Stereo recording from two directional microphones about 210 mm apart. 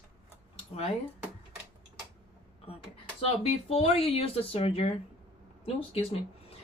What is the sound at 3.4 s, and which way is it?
Speech, 30° left (ahead or behind).